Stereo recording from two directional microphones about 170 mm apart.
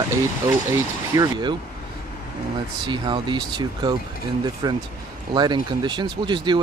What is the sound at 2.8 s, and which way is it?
Speech, 25° right (ahead or behind).